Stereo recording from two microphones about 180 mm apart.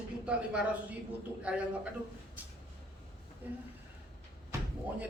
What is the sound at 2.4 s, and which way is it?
A man's voice, 10° right (ahead or behind).